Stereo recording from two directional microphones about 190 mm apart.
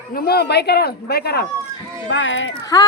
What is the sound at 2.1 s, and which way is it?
Speech, 90° left.